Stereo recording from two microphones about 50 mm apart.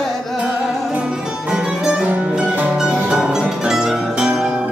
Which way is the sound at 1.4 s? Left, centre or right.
Centre.